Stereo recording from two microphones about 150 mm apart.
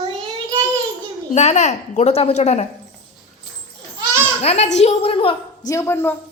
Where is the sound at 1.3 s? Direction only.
50° left (ahead or behind).